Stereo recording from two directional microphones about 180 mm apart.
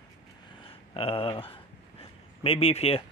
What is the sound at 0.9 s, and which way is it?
A man's voice, 30° left (ahead or behind).